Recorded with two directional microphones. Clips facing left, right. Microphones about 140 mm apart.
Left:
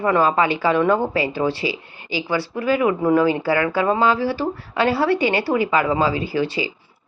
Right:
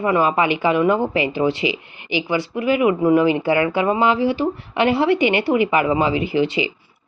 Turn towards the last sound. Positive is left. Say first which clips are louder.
# right 3 dB
turn(degrees=-20)  # may be behind; listen again after turning